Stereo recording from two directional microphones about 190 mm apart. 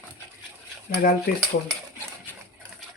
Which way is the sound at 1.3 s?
50° left (ahead or behind).